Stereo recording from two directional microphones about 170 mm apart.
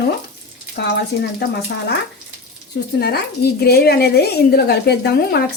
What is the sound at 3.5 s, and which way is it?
A woman's voice, 70° left (ahead or behind).